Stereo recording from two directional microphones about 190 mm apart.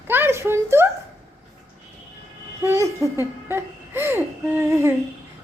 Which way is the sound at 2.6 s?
15° right (ahead or behind).